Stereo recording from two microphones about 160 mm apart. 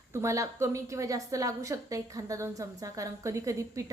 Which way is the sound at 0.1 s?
20° right (ahead or behind).